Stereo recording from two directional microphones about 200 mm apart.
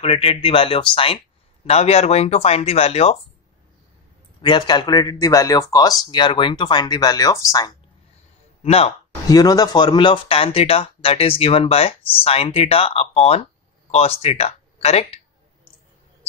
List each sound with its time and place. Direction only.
0.0 s speech: 30° left (ahead or behind)
4.4 s speech: 20° left (ahead or behind)
8.6 s speech: 30° left (ahead or behind)
9.3 s speech: 20° left (ahead or behind)